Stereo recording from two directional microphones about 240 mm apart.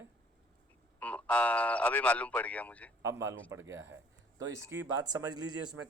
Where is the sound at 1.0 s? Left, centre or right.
Centre.